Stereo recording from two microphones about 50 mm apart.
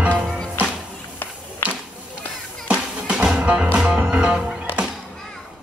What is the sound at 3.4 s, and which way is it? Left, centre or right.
Music, right.